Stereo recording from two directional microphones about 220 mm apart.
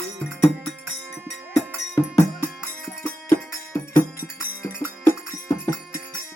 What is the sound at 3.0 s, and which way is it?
Music, 10° left (ahead or behind).